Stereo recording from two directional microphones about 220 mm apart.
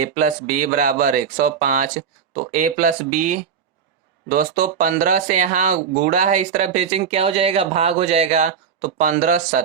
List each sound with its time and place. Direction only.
0.0 s speech: 35° right (ahead or behind)